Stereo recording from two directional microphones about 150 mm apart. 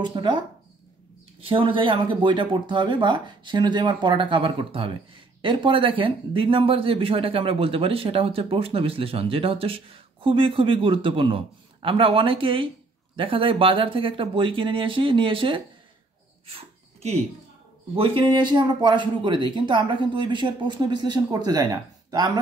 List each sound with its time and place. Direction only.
0.0 s speech: 30° right (ahead or behind)
1.4 s speech: 35° right (ahead or behind)
17.9 s speech: 35° right (ahead or behind)